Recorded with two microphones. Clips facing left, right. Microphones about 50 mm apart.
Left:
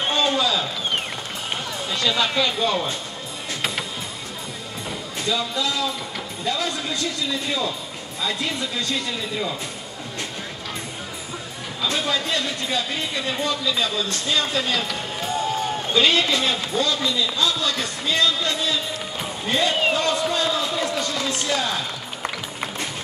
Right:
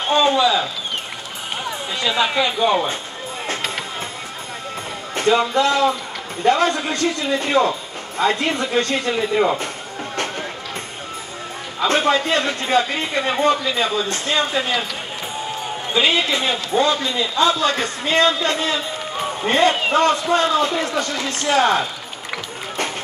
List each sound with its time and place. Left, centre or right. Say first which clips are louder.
0.1 s a sound: right 7 dB; right
1.6 s speech: right 3 dB; centre
5.1 s speech: right 9 dB; right
11.8 s speech: right 7 dB; right